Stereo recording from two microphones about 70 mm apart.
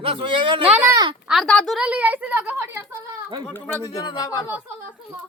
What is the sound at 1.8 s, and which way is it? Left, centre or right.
A woman's voice, right.